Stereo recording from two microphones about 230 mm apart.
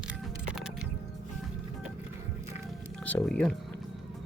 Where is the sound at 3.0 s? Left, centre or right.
Centre.